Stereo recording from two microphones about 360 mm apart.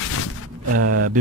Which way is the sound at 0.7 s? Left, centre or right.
Right.